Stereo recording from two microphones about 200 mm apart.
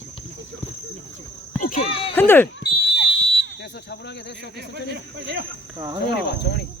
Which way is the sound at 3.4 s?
55° left (ahead or behind).